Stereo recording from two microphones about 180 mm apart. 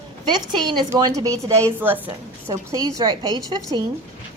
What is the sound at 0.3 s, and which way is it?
A woman's voice, 25° right (ahead or behind).